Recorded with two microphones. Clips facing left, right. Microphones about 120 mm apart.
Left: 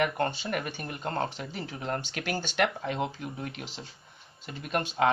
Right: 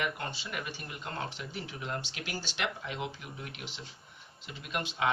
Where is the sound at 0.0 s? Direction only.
50° left (ahead or behind).